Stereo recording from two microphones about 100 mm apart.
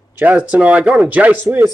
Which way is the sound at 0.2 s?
15° right (ahead or behind).